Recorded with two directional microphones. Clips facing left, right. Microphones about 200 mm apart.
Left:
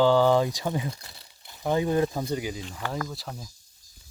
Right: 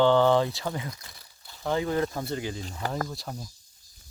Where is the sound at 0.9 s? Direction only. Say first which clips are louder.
Left 2 dB; 30° left (ahead or behind).